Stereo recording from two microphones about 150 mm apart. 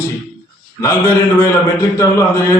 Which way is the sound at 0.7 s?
20° left (ahead or behind).